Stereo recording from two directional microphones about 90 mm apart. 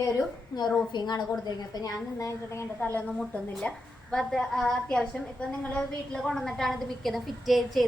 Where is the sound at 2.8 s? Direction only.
20° left (ahead or behind).